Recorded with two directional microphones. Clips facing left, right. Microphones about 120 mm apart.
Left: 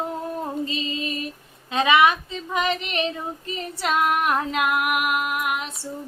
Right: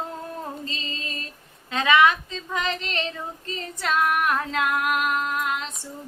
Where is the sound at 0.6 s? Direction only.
15° left (ahead or behind).